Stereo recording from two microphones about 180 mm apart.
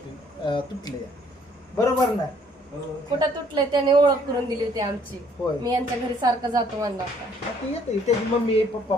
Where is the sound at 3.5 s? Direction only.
25° right (ahead or behind).